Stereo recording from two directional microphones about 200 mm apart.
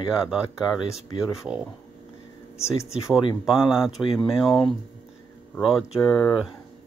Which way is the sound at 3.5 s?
5° right (ahead or behind).